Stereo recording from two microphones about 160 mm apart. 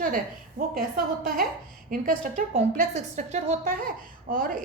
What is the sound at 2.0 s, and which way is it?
A woman's voice, 55° right (ahead or behind).